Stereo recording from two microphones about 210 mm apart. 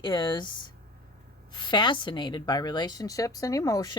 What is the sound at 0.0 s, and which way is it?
Speech, 20° left (ahead or behind).